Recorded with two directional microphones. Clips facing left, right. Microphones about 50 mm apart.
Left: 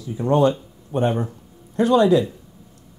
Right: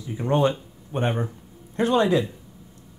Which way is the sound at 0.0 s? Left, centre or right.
Right.